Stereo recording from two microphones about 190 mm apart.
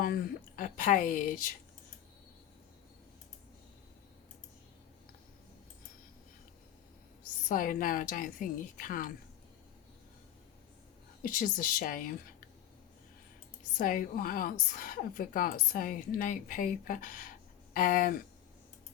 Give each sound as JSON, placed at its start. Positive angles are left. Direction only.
{"t": 0.0, "sound": "a woman's voice", "side_deg": 50}
{"t": 7.4, "sound": "a woman's voice", "side_deg": 45}
{"t": 11.2, "sound": "a woman's voice", "side_deg": 45}
{"t": 13.7, "sound": "a woman's voice", "side_deg": 45}